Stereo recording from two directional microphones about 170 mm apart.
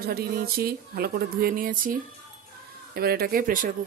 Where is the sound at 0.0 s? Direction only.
65° right (ahead or behind).